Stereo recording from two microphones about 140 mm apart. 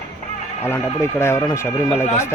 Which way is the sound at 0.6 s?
15° left (ahead or behind).